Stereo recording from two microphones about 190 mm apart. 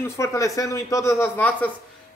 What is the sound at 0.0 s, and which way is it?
Speech, 15° left (ahead or behind).